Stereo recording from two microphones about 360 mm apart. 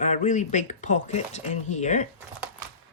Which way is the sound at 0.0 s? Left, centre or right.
Centre.